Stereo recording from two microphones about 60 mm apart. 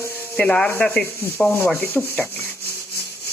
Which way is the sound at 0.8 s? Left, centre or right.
Centre.